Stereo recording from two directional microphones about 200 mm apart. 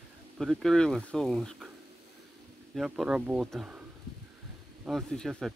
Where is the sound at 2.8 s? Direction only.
5° right (ahead or behind).